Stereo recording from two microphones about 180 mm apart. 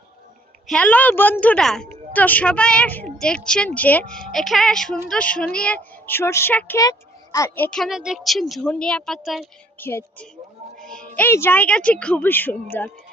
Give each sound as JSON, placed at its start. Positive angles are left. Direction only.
{"t": 0.7, "sound": "a woman's voice", "side_deg": 10}
{"t": 9.7, "sound": "speech", "side_deg": 10}
{"t": 10.8, "sound": "music", "side_deg": 5}
{"t": 11.2, "sound": "a woman's voice", "side_deg": 10}